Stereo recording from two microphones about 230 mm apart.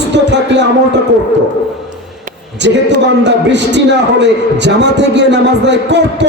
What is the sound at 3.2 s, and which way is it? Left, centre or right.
A man's voice, right.